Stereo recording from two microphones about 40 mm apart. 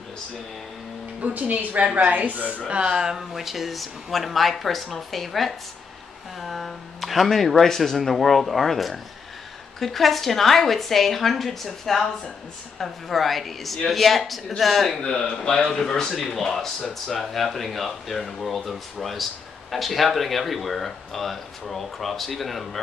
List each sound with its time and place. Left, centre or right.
1.2 s a woman's voice: right
2.7 s speech: centre
15.0 s speech: centre